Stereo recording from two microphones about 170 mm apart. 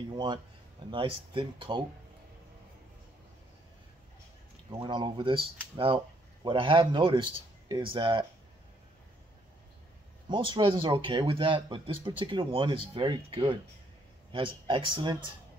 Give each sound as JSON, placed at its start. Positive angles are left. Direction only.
{"t": 0.1, "sound": "speech", "side_deg": -25}
{"t": 4.6, "sound": "speech", "side_deg": -25}
{"t": 10.3, "sound": "speech", "side_deg": -30}